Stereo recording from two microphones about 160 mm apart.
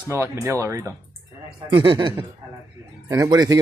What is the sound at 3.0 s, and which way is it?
Speech, 20° right (ahead or behind).